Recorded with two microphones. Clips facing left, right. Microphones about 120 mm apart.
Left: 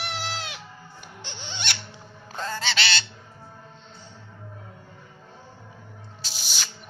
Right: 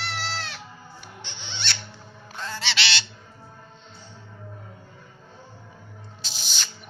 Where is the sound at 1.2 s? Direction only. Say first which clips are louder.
Left 2 dB; 45° left (ahead or behind).